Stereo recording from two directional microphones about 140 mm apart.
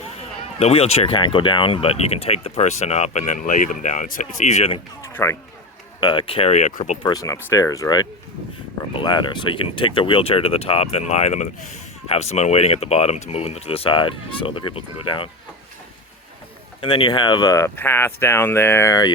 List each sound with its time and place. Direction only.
0.6 s speech: 50° left (ahead or behind)
5.0 s a sound: 20° left (ahead or behind)
6.0 s speech: 35° left (ahead or behind); by 7.0 s 55° left (ahead or behind)
7.0 s speech: 25° left (ahead or behind)
16.8 s speech: 35° left (ahead or behind)
17.5 s speech: 20° left (ahead or behind)